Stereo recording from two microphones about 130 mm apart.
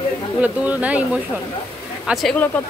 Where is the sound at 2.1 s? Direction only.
Centre (ahead or behind).